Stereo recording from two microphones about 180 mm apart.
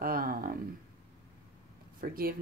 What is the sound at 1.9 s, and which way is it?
Speech, 55° right (ahead or behind).